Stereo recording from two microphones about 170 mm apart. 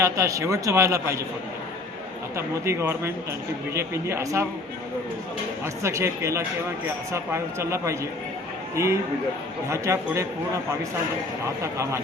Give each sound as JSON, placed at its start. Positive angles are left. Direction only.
{"t": 0.0, "sound": "a man's voice", "side_deg": -20}
{"t": 2.3, "sound": "a man's voice", "side_deg": -15}
{"t": 5.8, "sound": "a man's voice", "side_deg": -15}
{"t": 11.6, "sound": "a man's voice", "side_deg": -15}